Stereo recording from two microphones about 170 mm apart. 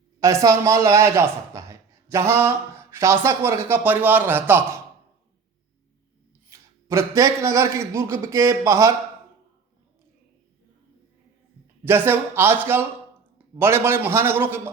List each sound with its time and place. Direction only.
0.2 s speech: 20° right (ahead or behind)
6.5 s speech: 15° right (ahead or behind)
11.9 s speech: 10° right (ahead or behind)